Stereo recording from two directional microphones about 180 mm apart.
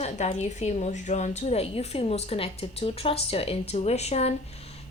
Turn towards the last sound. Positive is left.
turn(degrees=35)  # may be behind; listen again after turning